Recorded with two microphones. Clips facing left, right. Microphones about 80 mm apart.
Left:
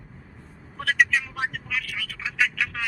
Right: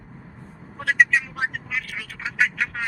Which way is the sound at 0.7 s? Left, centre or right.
Right.